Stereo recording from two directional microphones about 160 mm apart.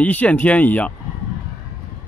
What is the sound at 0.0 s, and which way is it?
Speech, 10° left (ahead or behind).